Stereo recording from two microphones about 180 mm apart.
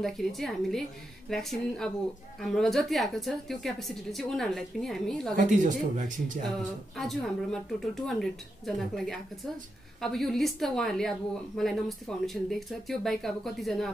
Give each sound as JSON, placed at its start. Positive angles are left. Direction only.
{"t": 0.0, "sound": "a woman's voice", "side_deg": 0}
{"t": 5.3, "sound": "speech", "side_deg": -45}
{"t": 7.0, "sound": "a woman's voice", "side_deg": 0}